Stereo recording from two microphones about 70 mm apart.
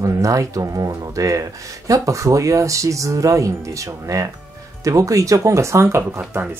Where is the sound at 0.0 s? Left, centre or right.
Right.